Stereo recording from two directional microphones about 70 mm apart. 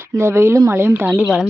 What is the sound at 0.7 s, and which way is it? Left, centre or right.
Speech, right.